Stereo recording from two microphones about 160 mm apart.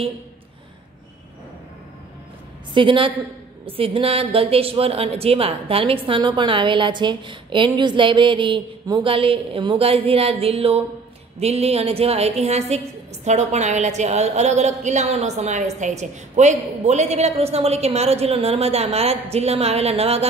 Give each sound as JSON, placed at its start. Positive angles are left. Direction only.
{"t": 2.7, "sound": "a woman's voice", "side_deg": -30}